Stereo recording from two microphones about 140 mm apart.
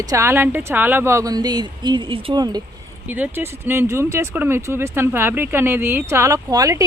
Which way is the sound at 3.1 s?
15° right (ahead or behind).